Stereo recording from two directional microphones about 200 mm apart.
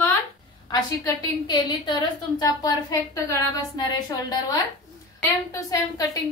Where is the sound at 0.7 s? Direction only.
20° left (ahead or behind).